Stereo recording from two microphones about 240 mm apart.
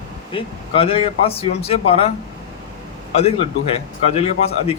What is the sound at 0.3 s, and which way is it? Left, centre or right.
A man's voice, left.